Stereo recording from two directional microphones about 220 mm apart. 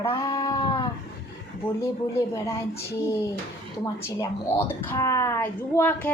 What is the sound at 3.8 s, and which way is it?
Speech, 15° left (ahead or behind).